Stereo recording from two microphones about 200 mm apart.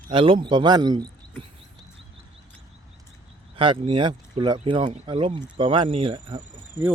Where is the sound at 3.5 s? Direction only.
25° right (ahead or behind).